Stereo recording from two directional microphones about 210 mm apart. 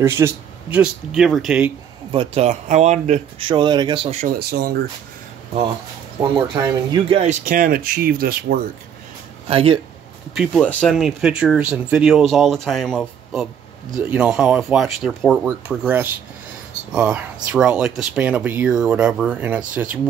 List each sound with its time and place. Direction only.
0.0 s speech: 10° right (ahead or behind)
2.1 s speech: 30° right (ahead or behind)
4.4 s speech: 45° right (ahead or behind)
6.3 s speech: 20° right (ahead or behind); by 8.5 s 45° right (ahead or behind)
9.5 s speech: 25° right (ahead or behind)
10.3 s speech: centre (ahead or behind)